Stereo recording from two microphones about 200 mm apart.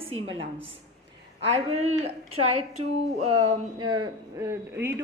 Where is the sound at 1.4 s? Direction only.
30° right (ahead or behind).